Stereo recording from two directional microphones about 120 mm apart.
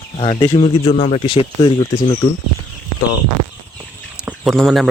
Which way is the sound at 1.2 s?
45° left (ahead or behind).